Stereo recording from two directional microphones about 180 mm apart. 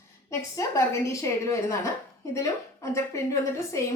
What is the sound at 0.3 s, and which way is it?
A woman's voice, 15° left (ahead or behind).